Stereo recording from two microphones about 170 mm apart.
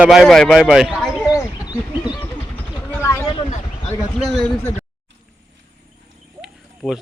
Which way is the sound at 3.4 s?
45° left (ahead or behind).